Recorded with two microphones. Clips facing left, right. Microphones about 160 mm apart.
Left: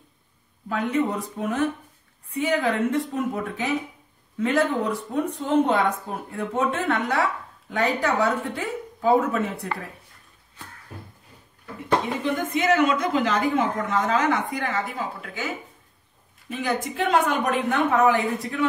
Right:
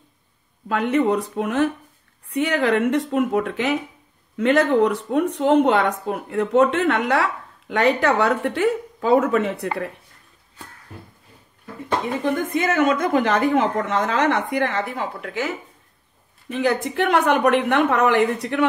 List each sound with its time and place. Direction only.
0.7 s a woman's voice: 75° right (ahead or behind)
12.2 s speech: 50° right (ahead or behind); by 15.5 s 70° right (ahead or behind)
16.5 s speech: 70° right (ahead or behind)